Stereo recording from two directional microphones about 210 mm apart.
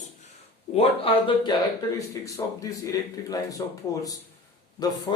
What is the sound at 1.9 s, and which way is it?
Speech, 15° left (ahead or behind).